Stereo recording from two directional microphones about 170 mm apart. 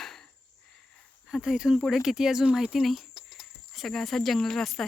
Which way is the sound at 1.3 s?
5° right (ahead or behind).